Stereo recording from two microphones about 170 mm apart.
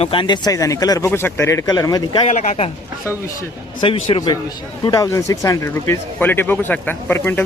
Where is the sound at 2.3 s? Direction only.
45° left (ahead or behind).